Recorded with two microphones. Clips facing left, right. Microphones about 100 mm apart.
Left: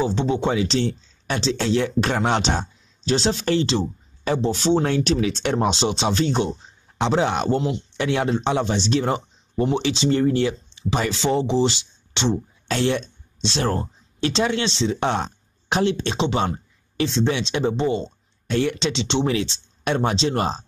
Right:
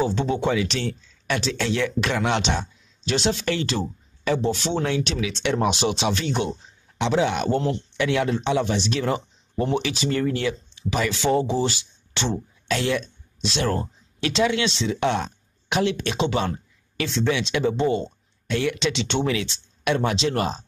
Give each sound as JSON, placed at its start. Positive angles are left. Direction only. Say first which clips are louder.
{"t": 0.1, "sound": "speech", "louder": "left 1 dB", "side_deg": 25}